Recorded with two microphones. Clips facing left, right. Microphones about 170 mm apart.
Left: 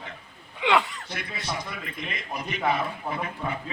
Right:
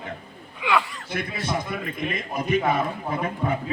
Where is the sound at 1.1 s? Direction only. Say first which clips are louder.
Right 6 dB; 50° right (ahead or behind).